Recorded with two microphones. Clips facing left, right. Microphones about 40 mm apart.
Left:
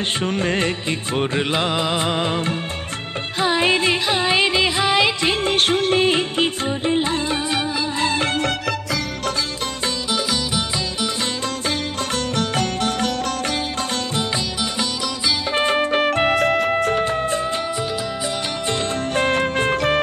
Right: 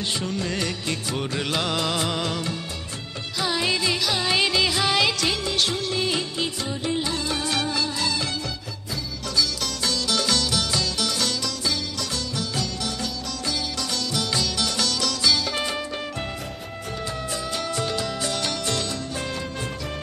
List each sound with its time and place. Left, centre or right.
0.2 s music: left
5.3 s music: left
10.1 s music: centre
12.4 s music: left
14.6 s music: centre
15.5 s music: left
17.0 s music: left
19.1 s music: left